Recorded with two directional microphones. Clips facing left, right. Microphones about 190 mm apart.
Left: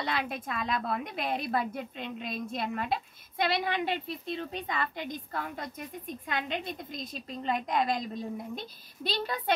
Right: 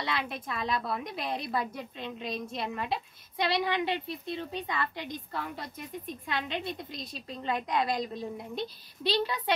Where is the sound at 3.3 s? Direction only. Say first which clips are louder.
Even; 50° left (ahead or behind).